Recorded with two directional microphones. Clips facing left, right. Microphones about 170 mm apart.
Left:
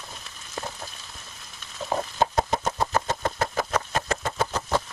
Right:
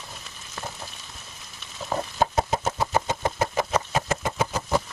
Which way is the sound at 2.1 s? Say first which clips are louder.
Right 1 dB; 5° right (ahead or behind).